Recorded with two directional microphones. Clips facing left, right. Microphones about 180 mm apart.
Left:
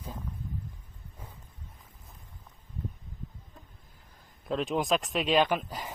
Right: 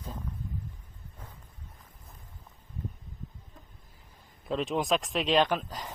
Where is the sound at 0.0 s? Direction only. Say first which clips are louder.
Even; 5° left (ahead or behind).